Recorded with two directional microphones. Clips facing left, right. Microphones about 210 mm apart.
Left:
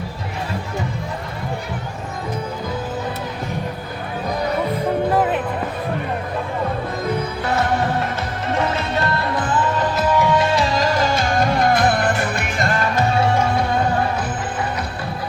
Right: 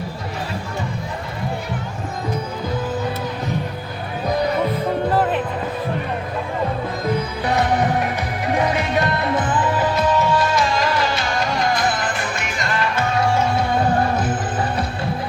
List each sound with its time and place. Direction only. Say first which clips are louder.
7.5 s music: right 1 dB; 15° right (ahead or behind)
10.2 s music: left 1 dB; 25° left (ahead or behind); by 13.1 s 45° left (ahead or behind)